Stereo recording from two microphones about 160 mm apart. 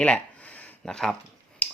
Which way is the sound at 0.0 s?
10° left (ahead or behind).